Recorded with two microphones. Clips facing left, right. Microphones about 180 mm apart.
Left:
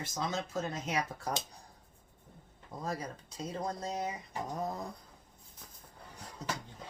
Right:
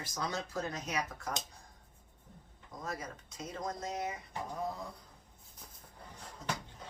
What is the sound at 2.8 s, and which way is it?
Speech, 35° left (ahead or behind).